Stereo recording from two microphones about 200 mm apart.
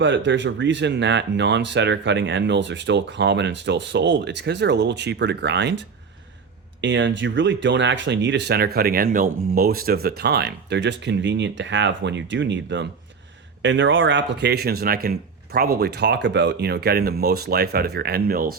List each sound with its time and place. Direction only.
0.0 s speech: 65° right (ahead or behind)
6.8 s speech: 65° right (ahead or behind); by 18.5 s 45° right (ahead or behind)